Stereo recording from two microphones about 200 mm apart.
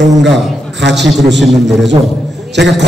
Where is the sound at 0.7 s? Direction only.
60° right (ahead or behind).